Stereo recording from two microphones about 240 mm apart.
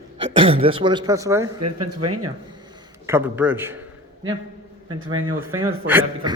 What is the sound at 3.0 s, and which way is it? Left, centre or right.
Speech, centre.